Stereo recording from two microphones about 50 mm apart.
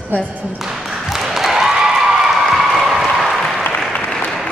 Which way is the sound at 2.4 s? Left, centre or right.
Centre.